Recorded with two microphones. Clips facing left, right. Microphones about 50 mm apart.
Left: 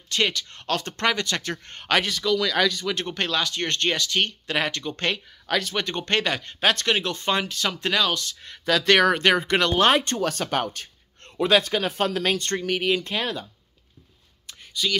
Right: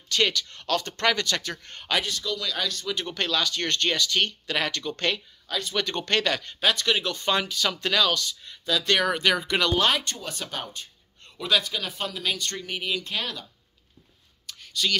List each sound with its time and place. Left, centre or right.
0.1 s speech: left
2.0 s speech: left
3.1 s speech: left
5.5 s speech: left
5.9 s speech: left
6.6 s speech: left
8.4 s speech: left
9.1 s speech: left
10.1 s speech: left
11.3 s a man's voice: left
12.6 s speech: left
13.1 s speech: left
14.8 s speech: centre